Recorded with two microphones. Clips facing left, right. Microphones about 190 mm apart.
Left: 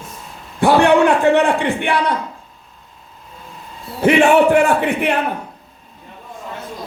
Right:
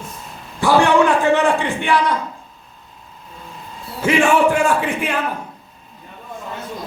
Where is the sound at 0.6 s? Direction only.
60° left (ahead or behind).